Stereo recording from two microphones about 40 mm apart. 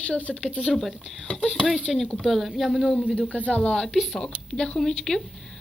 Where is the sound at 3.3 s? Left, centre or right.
Left.